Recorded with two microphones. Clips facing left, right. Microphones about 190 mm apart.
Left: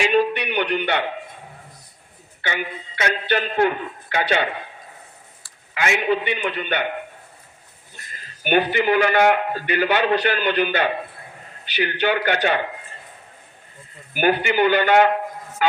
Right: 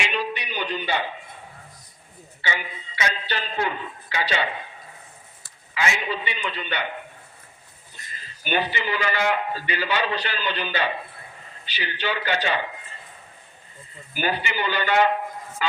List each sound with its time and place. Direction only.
0.0 s a sound: 50° left (ahead or behind); by 1.1 s 65° left (ahead or behind)
2.4 s a man's voice: 55° left (ahead or behind)
5.7 s a man's voice: 55° left (ahead or behind)
8.4 s a man's voice: 55° left (ahead or behind)
14.1 s a man's voice: 55° left (ahead or behind)